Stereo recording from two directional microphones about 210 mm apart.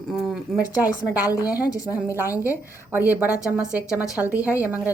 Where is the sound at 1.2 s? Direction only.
15° left (ahead or behind).